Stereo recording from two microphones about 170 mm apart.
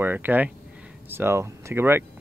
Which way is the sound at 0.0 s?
10° right (ahead or behind).